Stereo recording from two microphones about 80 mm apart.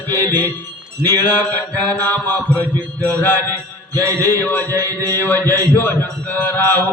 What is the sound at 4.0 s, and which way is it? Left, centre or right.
Mantra, right.